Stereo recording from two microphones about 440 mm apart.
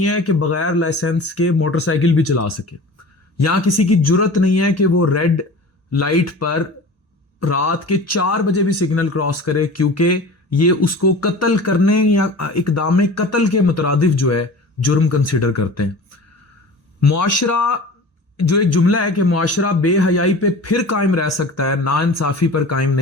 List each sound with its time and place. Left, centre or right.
0.0 s speech: left